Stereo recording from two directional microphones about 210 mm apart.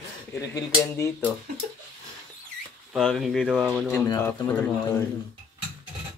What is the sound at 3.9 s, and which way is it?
Speech, 10° left (ahead or behind).